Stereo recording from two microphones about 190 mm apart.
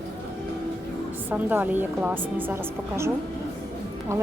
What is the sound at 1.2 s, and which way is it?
A woman's voice, 10° right (ahead or behind).